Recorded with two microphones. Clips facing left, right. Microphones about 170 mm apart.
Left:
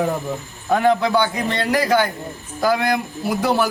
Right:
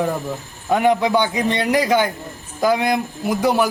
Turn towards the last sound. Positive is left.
turn(degrees=-15)  # may be behind; listen again after turning